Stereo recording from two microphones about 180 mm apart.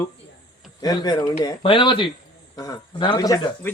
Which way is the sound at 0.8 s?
20° left (ahead or behind).